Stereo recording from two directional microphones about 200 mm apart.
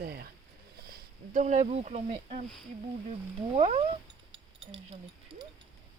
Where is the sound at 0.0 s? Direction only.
50° right (ahead or behind).